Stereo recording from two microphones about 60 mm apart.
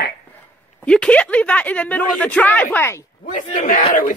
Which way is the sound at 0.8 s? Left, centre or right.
Centre.